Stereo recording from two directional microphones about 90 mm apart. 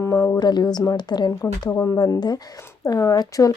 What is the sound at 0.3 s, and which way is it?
Speech, 50° left (ahead or behind).